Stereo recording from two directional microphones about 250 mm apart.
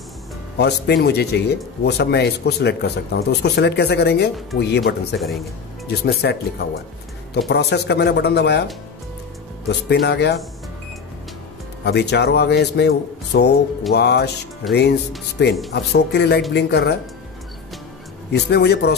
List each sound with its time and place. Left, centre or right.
0.6 s speech: left
9.7 s speech: left
11.8 s speech: left
18.3 s speech: left